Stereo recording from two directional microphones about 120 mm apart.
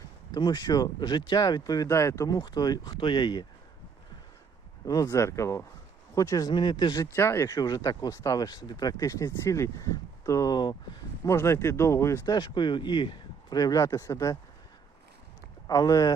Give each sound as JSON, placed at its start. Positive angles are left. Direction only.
{"t": 0.3, "sound": "speech", "side_deg": 40}
{"t": 4.9, "sound": "speech", "side_deg": 30}
{"t": 6.5, "sound": "speech", "side_deg": 40}
{"t": 7.2, "sound": "speech", "side_deg": 25}
{"t": 11.3, "sound": "speech", "side_deg": 25}
{"t": 12.3, "sound": "speech", "side_deg": 40}
{"t": 15.6, "sound": "speech", "side_deg": 30}